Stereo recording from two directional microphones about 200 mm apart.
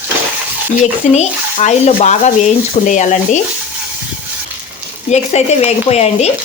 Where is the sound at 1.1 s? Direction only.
35° left (ahead or behind).